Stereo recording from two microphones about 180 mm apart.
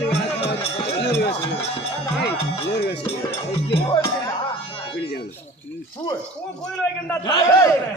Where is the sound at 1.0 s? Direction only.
70° left (ahead or behind).